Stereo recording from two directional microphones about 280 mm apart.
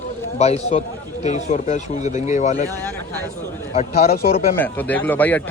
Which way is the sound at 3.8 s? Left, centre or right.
Left.